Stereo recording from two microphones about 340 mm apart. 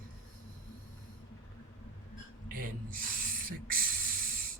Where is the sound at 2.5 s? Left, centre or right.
Right.